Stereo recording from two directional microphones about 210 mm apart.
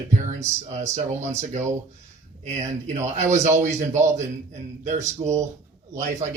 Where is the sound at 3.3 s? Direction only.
35° right (ahead or behind).